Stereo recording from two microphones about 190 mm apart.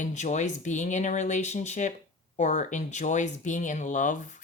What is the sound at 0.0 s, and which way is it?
Speech, 40° left (ahead or behind).